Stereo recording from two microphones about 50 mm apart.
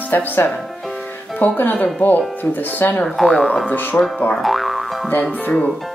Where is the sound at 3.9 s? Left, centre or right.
Left.